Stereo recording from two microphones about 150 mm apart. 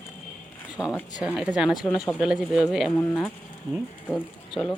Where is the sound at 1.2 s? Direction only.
5° right (ahead or behind).